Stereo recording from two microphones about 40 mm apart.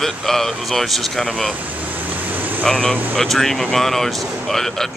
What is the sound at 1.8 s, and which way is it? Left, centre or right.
Vehicle, right.